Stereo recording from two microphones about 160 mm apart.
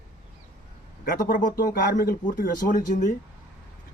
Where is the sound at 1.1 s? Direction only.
60° left (ahead or behind).